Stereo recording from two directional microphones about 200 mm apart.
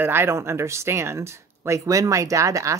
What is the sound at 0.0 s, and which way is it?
Speech, 10° right (ahead or behind).